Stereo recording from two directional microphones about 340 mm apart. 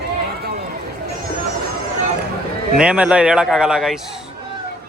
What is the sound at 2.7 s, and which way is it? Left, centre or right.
A man's voice, centre.